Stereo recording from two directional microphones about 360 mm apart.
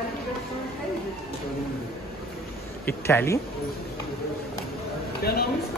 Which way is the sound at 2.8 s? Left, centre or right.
Centre.